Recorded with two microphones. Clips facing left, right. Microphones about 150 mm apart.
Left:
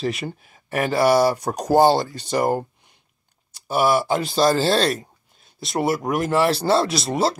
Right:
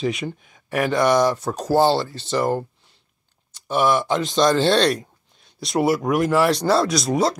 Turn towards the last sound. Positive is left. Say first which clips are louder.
# right 2 dB
turn(degrees=0)  # may be behind; listen again after turning